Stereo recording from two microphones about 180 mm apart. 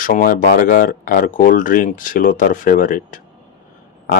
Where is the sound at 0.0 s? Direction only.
50° left (ahead or behind).